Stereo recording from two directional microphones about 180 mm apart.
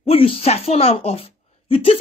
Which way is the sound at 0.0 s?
30° left (ahead or behind).